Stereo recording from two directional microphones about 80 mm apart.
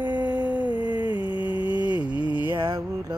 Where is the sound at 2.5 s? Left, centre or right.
Right.